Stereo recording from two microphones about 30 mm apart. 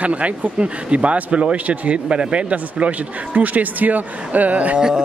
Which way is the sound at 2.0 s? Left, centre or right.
Right.